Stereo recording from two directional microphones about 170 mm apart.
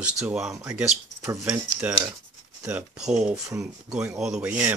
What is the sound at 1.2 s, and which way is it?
Speech, 15° right (ahead or behind).